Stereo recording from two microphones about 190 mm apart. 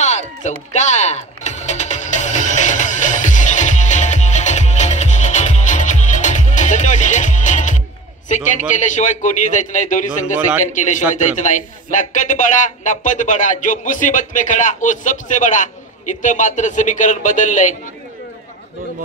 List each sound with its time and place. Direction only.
0.0 s music: 35° left (ahead or behind)
8.3 s speech: 40° left (ahead or behind)